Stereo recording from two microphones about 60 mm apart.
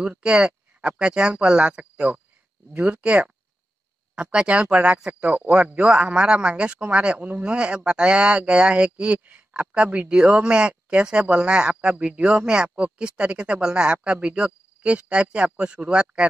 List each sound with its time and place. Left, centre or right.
0.0 s speech: centre